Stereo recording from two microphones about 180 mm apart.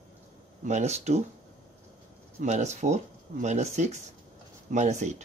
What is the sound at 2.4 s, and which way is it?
Speech, 40° right (ahead or behind).